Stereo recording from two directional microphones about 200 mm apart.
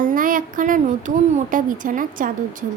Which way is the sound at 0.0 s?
45° right (ahead or behind).